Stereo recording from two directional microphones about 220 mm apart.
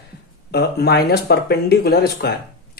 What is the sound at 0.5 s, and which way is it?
A man's voice, 45° left (ahead or behind).